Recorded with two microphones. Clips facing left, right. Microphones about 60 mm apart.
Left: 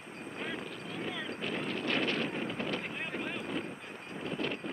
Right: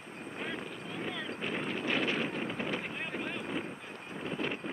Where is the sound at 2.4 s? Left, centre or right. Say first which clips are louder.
Even; centre.